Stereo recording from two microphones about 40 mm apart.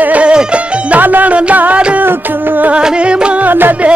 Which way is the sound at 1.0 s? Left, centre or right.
Right.